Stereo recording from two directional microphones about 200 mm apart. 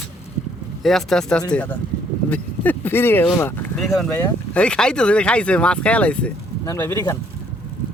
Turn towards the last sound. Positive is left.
turn(degrees=15)  # may be behind; listen again after turning